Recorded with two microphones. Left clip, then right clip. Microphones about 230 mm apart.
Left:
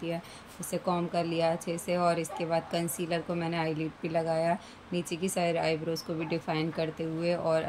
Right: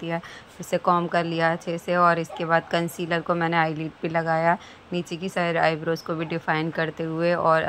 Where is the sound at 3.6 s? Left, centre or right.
Centre.